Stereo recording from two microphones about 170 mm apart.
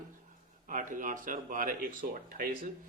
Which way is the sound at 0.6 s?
50° right (ahead or behind).